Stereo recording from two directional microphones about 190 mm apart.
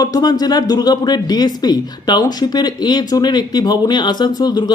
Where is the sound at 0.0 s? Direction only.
20° left (ahead or behind).